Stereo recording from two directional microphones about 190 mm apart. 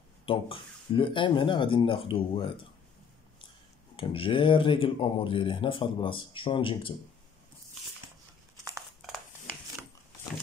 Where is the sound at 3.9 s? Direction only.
30° left (ahead or behind).